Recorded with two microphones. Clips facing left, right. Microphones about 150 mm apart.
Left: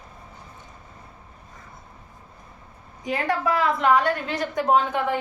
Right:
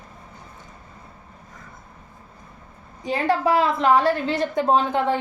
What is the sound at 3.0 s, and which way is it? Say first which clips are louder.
A woman's voice: right 3 dB; 30° right (ahead or behind).